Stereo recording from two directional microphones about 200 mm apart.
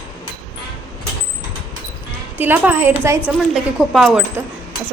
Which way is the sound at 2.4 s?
10° right (ahead or behind).